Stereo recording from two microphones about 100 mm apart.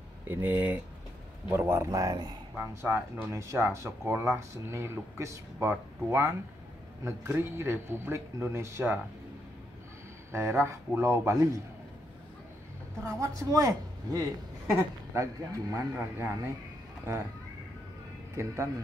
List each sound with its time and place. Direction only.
0.3 s speech: 20° right (ahead or behind); by 2.3 s 40° right (ahead or behind)
2.6 s speech: 25° right (ahead or behind)
10.3 s speech: 25° right (ahead or behind)
13.0 s speech: 30° right (ahead or behind)
18.3 s speech: 30° right (ahead or behind)